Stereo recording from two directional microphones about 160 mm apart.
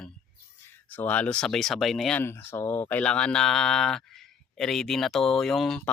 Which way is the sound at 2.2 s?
15° left (ahead or behind).